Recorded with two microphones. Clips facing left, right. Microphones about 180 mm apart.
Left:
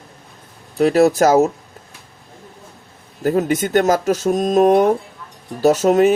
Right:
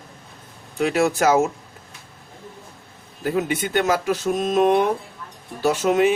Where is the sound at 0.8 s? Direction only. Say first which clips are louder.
Left 7 dB; 40° left (ahead or behind).